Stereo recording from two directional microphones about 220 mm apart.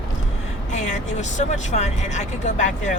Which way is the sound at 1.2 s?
35° left (ahead or behind).